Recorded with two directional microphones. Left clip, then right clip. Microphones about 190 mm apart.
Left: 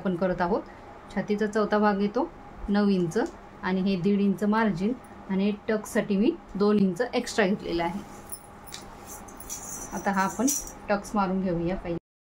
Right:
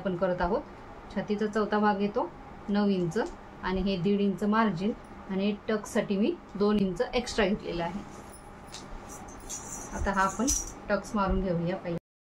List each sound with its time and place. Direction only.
0.2 s speech: 40° left (ahead or behind)
10.0 s speech: 35° left (ahead or behind)